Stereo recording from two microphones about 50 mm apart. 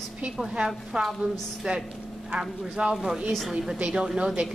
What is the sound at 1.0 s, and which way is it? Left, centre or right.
A woman's voice, centre.